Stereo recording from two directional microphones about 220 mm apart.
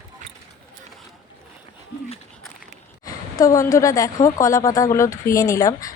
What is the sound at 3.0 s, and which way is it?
Speech, 15° left (ahead or behind).